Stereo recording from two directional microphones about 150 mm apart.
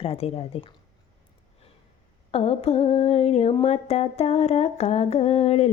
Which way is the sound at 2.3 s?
40° left (ahead or behind).